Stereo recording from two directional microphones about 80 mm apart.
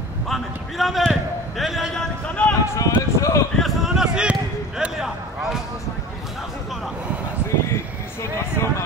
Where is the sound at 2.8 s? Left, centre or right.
Left.